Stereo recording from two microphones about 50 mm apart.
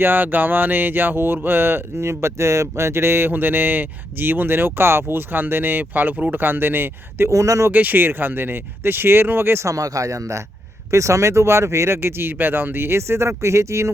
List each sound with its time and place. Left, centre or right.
0.0 s speech: right
7.3 s speech: right
7.7 s speech: right
9.6 s speech: right
11.9 s speech: right